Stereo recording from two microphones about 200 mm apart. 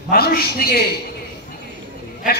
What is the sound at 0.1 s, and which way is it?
Speech, 50° left (ahead or behind).